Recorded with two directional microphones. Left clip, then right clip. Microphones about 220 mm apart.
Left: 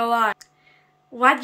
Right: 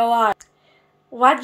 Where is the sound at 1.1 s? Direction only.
5° left (ahead or behind).